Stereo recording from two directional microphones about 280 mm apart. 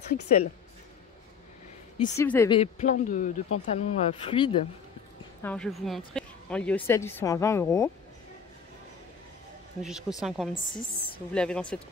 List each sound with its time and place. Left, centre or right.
0.1 s speech: left
2.0 s a woman's voice: centre
2.6 s speech: left
5.4 s a woman's voice: centre
9.8 s a woman's voice: centre
10.7 s a woman's voice: centre
11.3 s a woman's voice: centre